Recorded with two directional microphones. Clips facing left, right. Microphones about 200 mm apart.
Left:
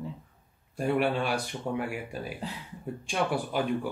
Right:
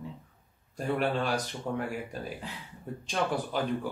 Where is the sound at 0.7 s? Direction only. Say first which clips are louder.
Left 3 dB; 10° left (ahead or behind).